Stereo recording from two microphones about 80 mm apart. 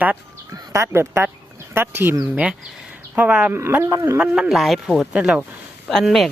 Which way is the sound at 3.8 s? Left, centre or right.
Right.